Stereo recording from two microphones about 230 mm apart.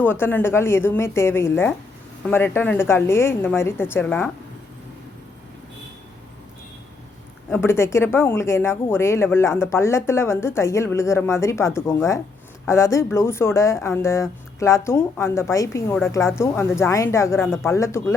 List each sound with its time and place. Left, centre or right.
0.0 s speech: centre
7.5 s speech: centre